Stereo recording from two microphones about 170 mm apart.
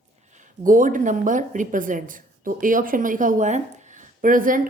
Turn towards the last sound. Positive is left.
turn(degrees=-55)  # may be behind; listen again after turning